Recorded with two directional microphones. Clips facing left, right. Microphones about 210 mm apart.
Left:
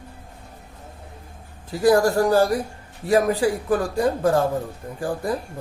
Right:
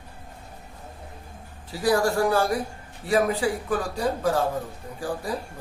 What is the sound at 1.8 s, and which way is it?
A man's voice, 45° left (ahead or behind).